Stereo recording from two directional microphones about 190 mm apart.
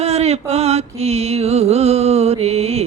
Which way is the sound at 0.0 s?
35° right (ahead or behind).